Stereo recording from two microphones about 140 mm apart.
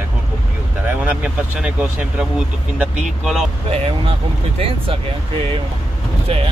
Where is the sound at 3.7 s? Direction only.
40° right (ahead or behind).